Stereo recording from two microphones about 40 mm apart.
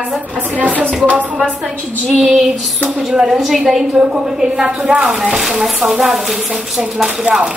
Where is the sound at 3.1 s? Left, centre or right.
Centre.